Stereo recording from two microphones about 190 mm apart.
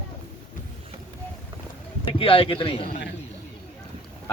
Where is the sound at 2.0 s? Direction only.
30° left (ahead or behind).